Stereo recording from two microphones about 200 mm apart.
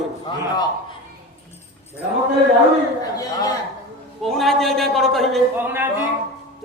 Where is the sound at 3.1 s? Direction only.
20° left (ahead or behind).